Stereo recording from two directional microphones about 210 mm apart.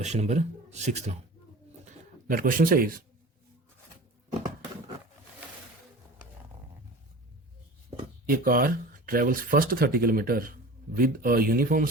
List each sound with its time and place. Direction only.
0.0 s a man's voice: 30° right (ahead or behind)
1.8 s a sound: 40° right (ahead or behind)
8.3 s speech: 40° right (ahead or behind)